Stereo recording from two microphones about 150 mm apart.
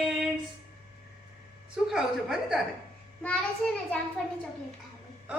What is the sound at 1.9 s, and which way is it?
Speech, 5° right (ahead or behind).